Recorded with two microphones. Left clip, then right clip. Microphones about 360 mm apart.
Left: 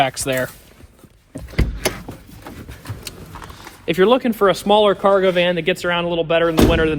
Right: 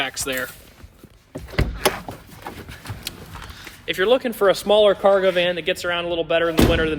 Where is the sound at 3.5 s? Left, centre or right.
Centre.